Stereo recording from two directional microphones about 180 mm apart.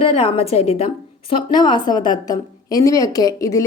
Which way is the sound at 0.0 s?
30° left (ahead or behind).